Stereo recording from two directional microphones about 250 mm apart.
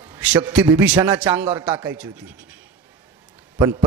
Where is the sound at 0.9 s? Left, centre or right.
Centre.